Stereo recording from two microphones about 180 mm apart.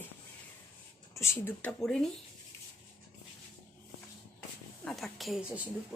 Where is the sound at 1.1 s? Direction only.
15° left (ahead or behind).